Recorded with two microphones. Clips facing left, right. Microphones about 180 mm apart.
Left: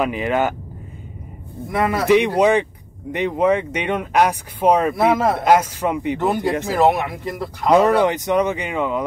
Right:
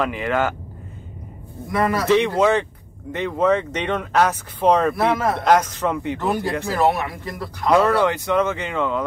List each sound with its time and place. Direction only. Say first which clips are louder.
0.0 s speech: left 2 dB; 20° left (ahead or behind)
2.0 s speech: left 3 dB; 15° left (ahead or behind)